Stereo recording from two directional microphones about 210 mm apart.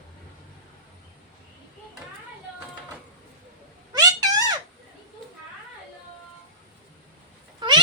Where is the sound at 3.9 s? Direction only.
20° right (ahead or behind).